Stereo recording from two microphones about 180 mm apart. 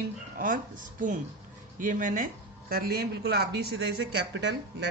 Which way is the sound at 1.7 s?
45° right (ahead or behind).